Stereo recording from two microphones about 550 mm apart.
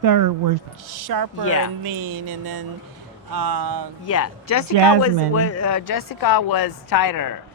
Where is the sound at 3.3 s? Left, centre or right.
Right.